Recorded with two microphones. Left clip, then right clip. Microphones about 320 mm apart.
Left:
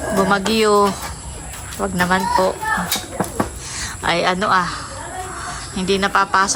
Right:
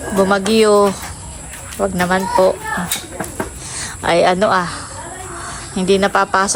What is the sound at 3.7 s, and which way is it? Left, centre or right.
A woman's voice, centre.